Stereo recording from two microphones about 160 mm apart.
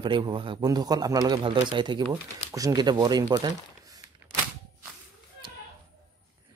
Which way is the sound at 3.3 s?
25° right (ahead or behind).